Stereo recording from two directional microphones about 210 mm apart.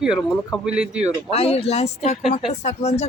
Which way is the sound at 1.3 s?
30° left (ahead or behind).